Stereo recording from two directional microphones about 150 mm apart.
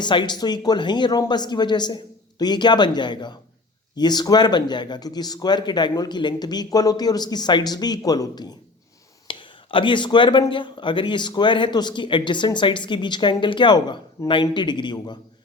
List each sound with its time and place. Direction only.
0.0 s a man's voice: 30° left (ahead or behind)